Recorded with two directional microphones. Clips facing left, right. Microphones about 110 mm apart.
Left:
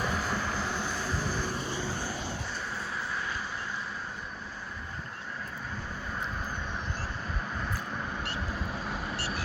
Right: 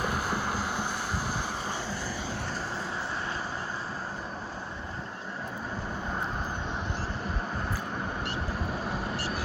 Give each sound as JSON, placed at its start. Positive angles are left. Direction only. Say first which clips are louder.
{"t": 0.0, "sound": "vehicle", "louder": "right 1 dB", "side_deg": -10}